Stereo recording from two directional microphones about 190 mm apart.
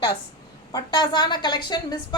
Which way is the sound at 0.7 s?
25° left (ahead or behind).